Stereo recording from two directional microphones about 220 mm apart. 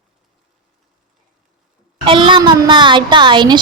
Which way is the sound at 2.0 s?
20° right (ahead or behind).